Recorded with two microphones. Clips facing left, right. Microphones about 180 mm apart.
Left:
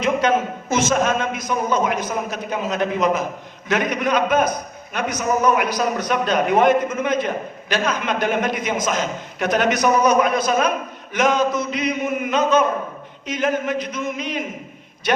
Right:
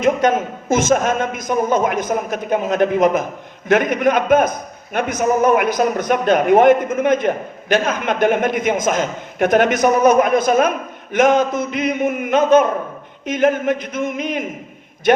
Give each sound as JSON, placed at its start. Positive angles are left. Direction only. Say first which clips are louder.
{"t": 0.0, "sound": "a man's voice", "louder": "right 3 dB", "side_deg": -50}